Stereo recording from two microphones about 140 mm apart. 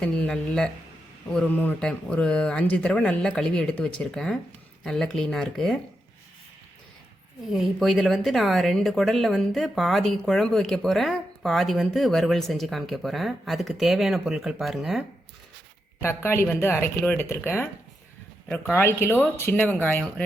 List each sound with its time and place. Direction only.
0.0 s speech: 5° left (ahead or behind)
7.4 s speech: centre (ahead or behind)
16.0 s speech: 15° left (ahead or behind)